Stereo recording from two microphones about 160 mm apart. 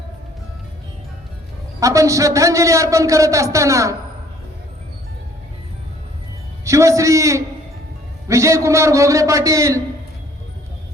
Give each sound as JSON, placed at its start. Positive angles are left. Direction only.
{"t": 1.8, "sound": "a man's voice", "side_deg": -20}
{"t": 6.7, "sound": "a man's voice", "side_deg": -20}